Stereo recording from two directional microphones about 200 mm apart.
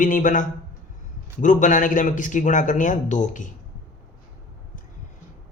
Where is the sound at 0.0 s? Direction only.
40° left (ahead or behind).